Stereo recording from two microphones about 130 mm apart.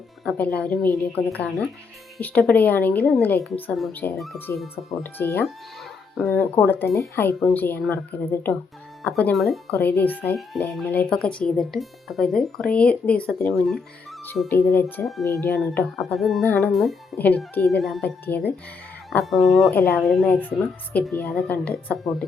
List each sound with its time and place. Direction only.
0.3 s speech: 10° left (ahead or behind)
9.8 s speech: 15° left (ahead or behind)
10.3 s speech: centre (ahead or behind)
14.4 s speech: 15° left (ahead or behind)
16.0 s speech: centre (ahead or behind)
17.2 s speech: 15° left (ahead or behind)
17.7 s speech: centre (ahead or behind)
18.0 s speech: 10° left (ahead or behind)
19.2 s speech: centre (ahead or behind)
19.7 s speech: 10° left (ahead or behind)
21.1 s speech: 15° left (ahead or behind)